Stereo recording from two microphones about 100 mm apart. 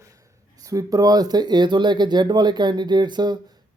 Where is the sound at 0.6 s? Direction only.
35° right (ahead or behind).